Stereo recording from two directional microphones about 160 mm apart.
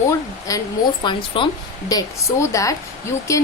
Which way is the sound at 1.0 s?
30° left (ahead or behind).